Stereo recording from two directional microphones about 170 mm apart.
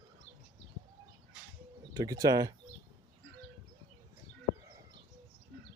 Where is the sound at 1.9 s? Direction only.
20° right (ahead or behind).